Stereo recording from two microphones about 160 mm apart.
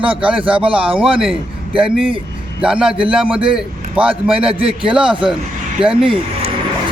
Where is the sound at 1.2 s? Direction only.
5° right (ahead or behind).